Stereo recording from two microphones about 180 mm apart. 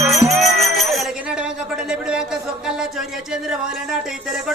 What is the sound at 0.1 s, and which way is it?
Music, centre (ahead or behind).